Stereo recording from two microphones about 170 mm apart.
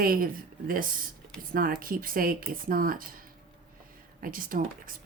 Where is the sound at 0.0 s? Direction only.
60° right (ahead or behind).